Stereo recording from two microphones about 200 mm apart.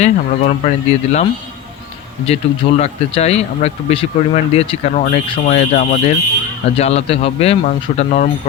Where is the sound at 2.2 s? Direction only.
30° left (ahead or behind).